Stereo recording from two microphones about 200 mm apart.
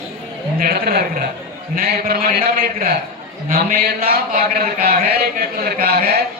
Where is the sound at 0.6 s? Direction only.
50° right (ahead or behind).